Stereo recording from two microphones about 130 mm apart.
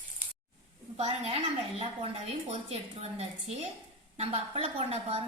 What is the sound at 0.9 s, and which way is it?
A woman's voice, 50° right (ahead or behind).